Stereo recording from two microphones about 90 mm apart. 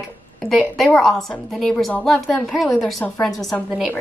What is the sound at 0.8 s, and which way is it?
A woman's voice, 5° left (ahead or behind).